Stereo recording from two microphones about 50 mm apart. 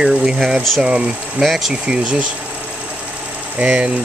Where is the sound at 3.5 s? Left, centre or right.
Right.